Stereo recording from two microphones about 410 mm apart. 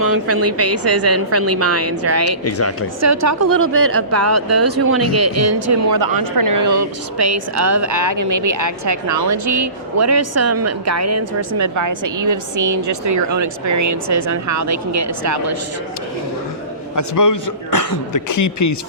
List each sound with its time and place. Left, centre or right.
0.0 s a woman's voice: right
2.4 s speech: left
3.0 s a woman's voice: right
5.6 s a woman's voice: right
16.9 s a man's voice: left